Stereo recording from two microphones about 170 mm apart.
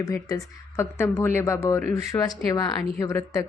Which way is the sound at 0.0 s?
20° left (ahead or behind).